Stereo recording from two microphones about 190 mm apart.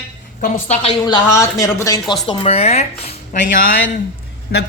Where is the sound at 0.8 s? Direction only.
25° left (ahead or behind).